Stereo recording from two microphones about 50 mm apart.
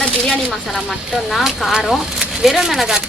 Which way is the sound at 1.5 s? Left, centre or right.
Centre.